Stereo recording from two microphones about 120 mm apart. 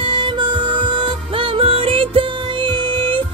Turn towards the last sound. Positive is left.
turn(degrees=-45)  # may be behind; listen again after turning